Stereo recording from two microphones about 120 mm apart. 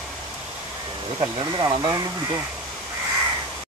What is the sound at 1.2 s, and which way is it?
Speech, 30° right (ahead or behind).